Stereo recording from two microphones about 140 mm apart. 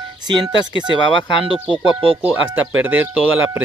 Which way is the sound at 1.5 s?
Centre (ahead or behind).